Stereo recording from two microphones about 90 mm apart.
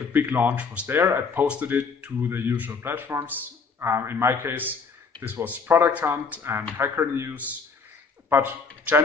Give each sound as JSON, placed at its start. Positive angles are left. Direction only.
{"t": 0.1, "sound": "speech", "side_deg": -20}
{"t": 0.8, "sound": "speech", "side_deg": -25}